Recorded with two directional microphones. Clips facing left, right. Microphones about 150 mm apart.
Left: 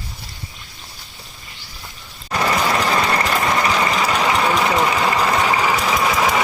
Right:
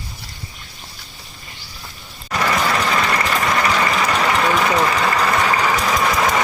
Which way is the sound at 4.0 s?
10° left (ahead or behind).